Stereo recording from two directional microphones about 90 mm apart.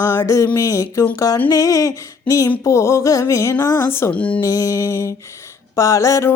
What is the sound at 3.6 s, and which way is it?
Speech, 30° left (ahead or behind).